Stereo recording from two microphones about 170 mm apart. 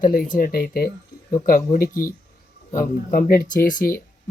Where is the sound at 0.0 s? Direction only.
55° left (ahead or behind).